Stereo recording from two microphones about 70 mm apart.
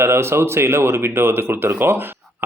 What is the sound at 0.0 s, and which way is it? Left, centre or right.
Speech, right.